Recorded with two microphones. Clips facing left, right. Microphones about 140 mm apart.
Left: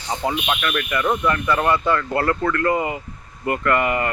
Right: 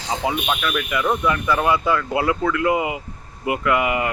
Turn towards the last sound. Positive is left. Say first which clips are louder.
# even
turn(degrees=-5)  # may be behind; listen again after turning